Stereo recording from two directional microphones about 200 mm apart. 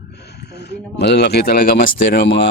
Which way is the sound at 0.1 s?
55° left (ahead or behind).